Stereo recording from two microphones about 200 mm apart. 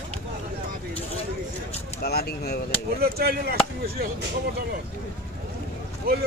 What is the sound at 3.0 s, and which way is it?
Speech, 50° right (ahead or behind).